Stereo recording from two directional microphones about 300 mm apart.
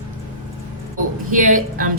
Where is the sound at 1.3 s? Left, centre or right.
Right.